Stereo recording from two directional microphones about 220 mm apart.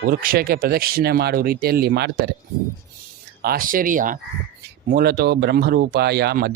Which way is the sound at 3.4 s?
40° right (ahead or behind).